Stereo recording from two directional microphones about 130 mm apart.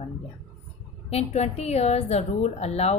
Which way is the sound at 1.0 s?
55° left (ahead or behind).